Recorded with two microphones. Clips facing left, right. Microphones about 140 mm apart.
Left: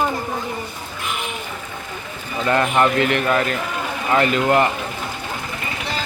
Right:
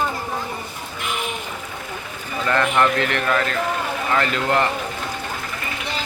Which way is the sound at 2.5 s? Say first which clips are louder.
Left 2 dB; 15° left (ahead or behind).